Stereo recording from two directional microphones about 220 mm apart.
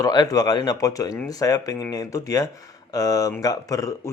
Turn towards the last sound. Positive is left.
turn(degrees=15)  # may be behind; listen again after turning